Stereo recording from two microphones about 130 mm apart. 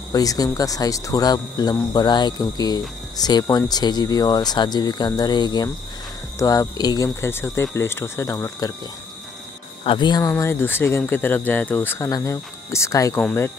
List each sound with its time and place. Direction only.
0.1 s speech: 30° left (ahead or behind)
9.8 s speech: 35° left (ahead or behind)
10.3 s speech: 15° left (ahead or behind)